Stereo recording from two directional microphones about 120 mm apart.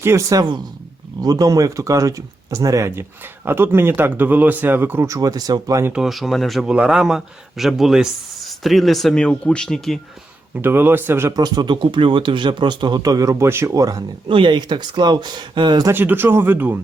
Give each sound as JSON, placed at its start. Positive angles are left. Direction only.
{"t": 0.0, "sound": "speech", "side_deg": -25}
{"t": 5.9, "sound": "a man's voice", "side_deg": -5}
{"t": 10.5, "sound": "speech", "side_deg": -20}
{"t": 11.3, "sound": "speech", "side_deg": -35}
{"t": 14.3, "sound": "speech", "side_deg": -45}
{"t": 15.9, "sound": "speech", "side_deg": -15}